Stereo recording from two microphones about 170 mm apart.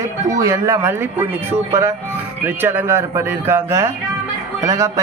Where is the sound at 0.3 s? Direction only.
20° right (ahead or behind).